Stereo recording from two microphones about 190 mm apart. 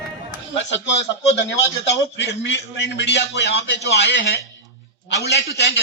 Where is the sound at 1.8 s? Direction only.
65° left (ahead or behind).